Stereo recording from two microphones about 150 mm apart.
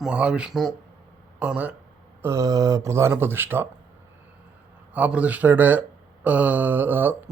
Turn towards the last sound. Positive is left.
turn(degrees=-15)  # may be behind; listen again after turning